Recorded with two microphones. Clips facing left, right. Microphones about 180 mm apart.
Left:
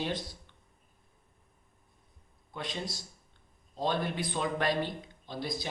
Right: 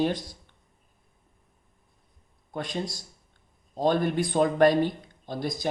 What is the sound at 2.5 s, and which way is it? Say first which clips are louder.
Speech: right 6 dB; 45° right (ahead or behind).